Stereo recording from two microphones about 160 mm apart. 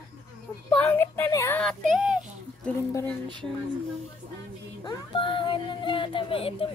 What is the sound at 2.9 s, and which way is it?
Speech, 15° left (ahead or behind).